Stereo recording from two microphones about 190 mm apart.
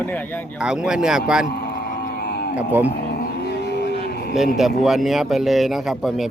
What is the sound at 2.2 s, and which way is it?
Livestock, 60° left (ahead or behind).